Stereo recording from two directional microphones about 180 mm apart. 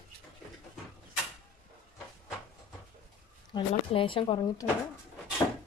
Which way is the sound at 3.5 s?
30° left (ahead or behind).